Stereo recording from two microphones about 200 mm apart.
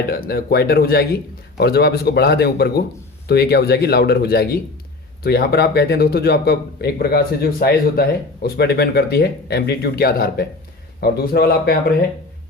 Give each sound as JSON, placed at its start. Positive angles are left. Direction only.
{"t": 0.1, "sound": "a man's voice", "side_deg": 50}